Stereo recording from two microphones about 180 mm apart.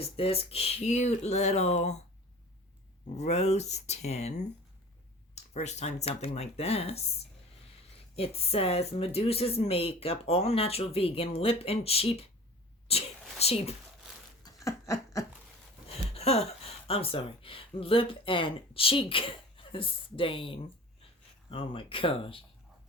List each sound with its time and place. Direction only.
0.2 s speech: 35° left (ahead or behind)
3.2 s speech: 35° left (ahead or behind)
8.1 s speech: 35° left (ahead or behind)
14.4 s a sound: 15° left (ahead or behind)
16.1 s speech: 35° left (ahead or behind)